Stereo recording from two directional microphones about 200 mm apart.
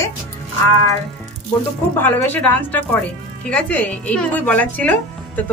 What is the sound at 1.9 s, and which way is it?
A woman's voice, 10° left (ahead or behind).